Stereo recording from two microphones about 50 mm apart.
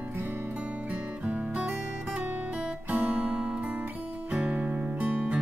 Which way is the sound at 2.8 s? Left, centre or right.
Right.